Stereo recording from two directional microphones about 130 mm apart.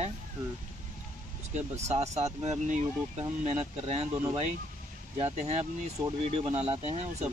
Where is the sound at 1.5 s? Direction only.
60° right (ahead or behind).